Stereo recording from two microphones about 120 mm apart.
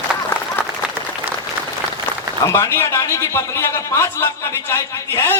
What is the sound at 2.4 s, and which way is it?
A man's voice, 25° left (ahead or behind).